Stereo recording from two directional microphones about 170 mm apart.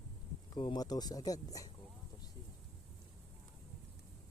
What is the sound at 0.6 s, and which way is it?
Speech, 25° left (ahead or behind).